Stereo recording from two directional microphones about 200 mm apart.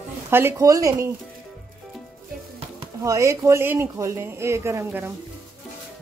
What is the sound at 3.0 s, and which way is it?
Speech, 15° right (ahead or behind).